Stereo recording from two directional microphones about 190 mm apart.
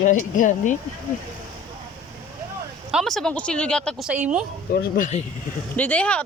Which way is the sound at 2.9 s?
Centre (ahead or behind).